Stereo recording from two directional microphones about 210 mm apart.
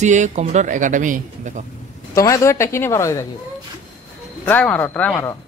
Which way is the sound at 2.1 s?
15° left (ahead or behind).